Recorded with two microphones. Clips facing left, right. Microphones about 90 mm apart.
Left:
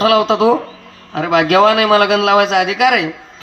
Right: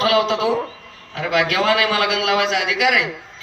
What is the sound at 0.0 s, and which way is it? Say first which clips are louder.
A man's voice: left 6 dB; 45° left (ahead or behind).